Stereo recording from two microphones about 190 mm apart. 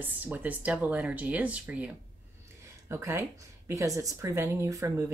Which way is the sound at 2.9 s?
10° right (ahead or behind).